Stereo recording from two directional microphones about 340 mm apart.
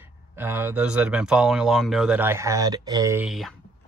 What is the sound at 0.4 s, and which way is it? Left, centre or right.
Speech, centre.